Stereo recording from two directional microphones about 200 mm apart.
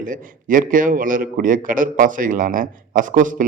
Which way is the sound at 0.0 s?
40° right (ahead or behind).